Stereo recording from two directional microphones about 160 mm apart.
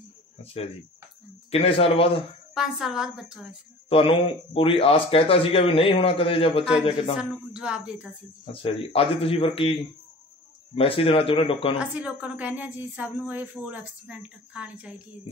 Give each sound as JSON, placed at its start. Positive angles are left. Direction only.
{"t": 0.4, "sound": "speech", "side_deg": 40}
{"t": 2.5, "sound": "speech", "side_deg": -5}
{"t": 3.9, "sound": "speech", "side_deg": 35}
{"t": 7.2, "sound": "speech", "side_deg": -5}
{"t": 8.5, "sound": "speech", "side_deg": 35}
{"t": 11.8, "sound": "a woman's voice", "side_deg": -10}